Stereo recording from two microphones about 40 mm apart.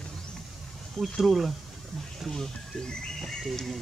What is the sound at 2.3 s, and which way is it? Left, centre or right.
Speech, centre.